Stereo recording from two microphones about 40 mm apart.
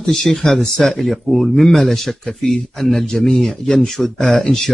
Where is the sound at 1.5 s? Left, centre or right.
Centre.